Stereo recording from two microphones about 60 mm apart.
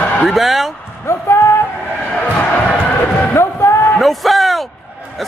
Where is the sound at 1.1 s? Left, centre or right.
Left.